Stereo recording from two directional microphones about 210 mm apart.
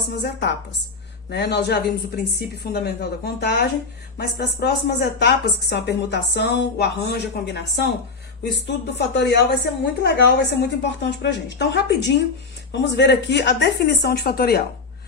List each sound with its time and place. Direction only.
0.2 s a woman's voice: 55° left (ahead or behind)